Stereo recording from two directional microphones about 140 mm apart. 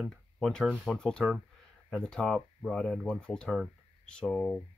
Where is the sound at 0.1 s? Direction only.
5° left (ahead or behind).